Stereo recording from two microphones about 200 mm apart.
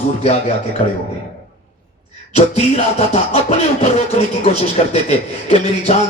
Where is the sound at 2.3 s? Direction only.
30° left (ahead or behind).